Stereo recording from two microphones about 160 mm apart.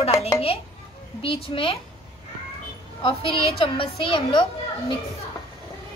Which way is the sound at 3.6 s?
30° left (ahead or behind).